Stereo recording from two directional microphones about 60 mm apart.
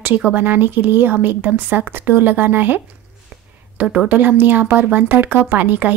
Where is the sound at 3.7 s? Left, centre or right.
Right.